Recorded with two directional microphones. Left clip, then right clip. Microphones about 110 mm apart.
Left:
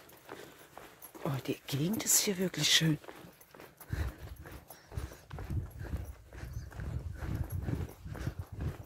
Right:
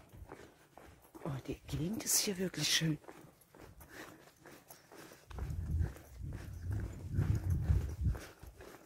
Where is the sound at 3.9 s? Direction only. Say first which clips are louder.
Left 6 dB; 5° left (ahead or behind).